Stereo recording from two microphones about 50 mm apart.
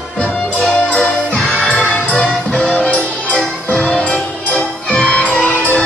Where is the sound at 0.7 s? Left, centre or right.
Left.